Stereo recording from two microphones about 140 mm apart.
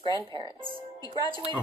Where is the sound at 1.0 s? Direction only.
30° left (ahead or behind).